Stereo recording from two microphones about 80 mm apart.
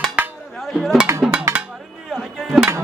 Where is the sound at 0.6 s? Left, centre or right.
Centre.